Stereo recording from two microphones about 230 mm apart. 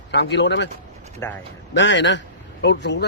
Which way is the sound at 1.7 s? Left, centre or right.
Left.